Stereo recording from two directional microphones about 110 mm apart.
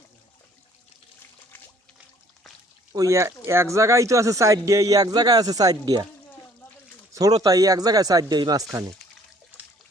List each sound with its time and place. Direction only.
2.9 s a man's voice: 30° right (ahead or behind)
7.1 s a man's voice: 35° right (ahead or behind)